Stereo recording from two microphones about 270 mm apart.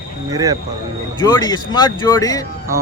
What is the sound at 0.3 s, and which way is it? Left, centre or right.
Speech, centre.